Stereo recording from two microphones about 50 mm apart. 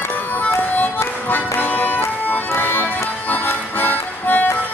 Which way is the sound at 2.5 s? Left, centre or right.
Left.